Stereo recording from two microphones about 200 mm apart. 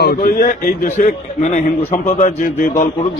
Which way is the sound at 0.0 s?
50° left (ahead or behind).